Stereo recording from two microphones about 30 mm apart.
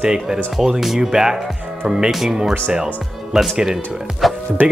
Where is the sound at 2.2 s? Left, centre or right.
Centre.